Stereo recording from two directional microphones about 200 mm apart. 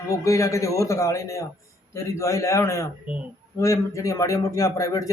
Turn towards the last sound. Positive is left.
turn(degrees=15)  # may be behind; listen again after turning